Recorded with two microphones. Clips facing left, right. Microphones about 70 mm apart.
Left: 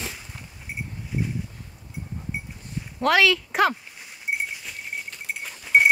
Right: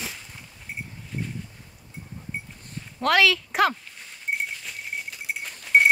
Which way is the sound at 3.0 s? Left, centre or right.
Centre.